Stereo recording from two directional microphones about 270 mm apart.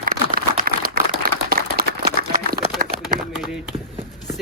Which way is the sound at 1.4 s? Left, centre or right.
Right.